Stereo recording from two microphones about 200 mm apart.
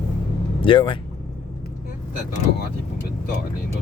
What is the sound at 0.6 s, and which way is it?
Speech, 25° left (ahead or behind).